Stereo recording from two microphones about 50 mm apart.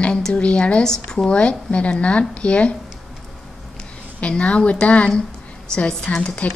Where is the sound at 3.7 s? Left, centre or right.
Centre.